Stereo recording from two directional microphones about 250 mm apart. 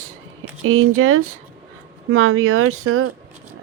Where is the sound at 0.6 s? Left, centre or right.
Right.